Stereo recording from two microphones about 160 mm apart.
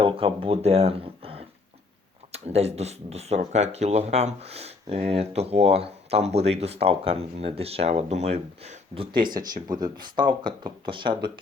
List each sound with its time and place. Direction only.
0.0 s speech: 35° right (ahead or behind)
9.1 s speech: 25° right (ahead or behind)